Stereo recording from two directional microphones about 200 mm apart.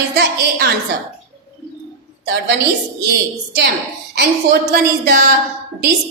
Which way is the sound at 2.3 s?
50° right (ahead or behind).